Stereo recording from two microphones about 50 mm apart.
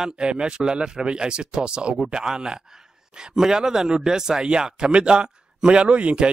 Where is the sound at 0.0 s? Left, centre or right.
Centre.